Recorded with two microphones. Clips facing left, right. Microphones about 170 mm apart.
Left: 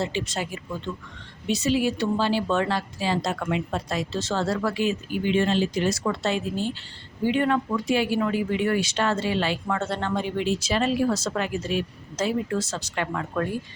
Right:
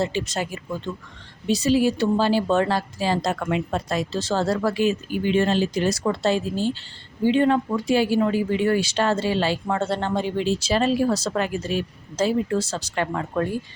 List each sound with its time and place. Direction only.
0.0 s speech: 40° right (ahead or behind)